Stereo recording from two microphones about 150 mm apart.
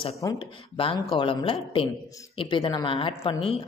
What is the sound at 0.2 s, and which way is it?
Speech, 25° left (ahead or behind).